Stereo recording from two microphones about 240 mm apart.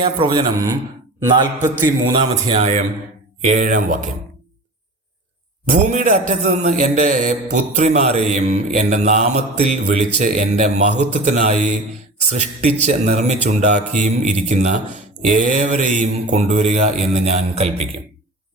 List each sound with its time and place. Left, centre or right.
0.0 s mantra: right
1.2 s a man's voice: centre
2.1 s mantra: right
3.4 s speech: right
5.7 s mantra: right